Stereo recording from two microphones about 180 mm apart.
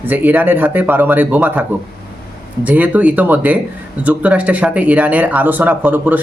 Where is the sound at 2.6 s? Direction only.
10° right (ahead or behind).